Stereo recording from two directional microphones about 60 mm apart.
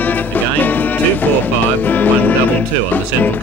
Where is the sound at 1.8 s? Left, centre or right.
Left.